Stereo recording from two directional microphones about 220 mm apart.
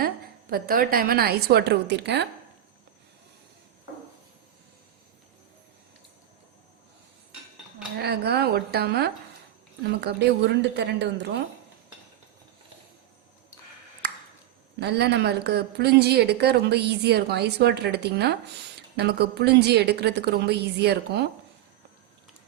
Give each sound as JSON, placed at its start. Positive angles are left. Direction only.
{"t": 0.5, "sound": "speech", "side_deg": -45}
{"t": 7.9, "sound": "speech", "side_deg": -50}
{"t": 14.8, "sound": "speech", "side_deg": -50}